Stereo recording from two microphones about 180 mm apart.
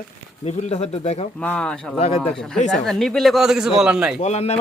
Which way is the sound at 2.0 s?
35° left (ahead or behind).